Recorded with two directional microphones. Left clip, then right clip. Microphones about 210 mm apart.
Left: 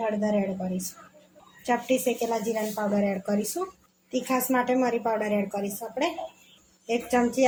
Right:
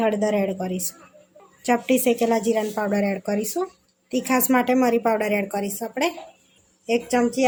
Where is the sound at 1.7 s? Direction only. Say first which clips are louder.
Right 5 dB; 35° right (ahead or behind).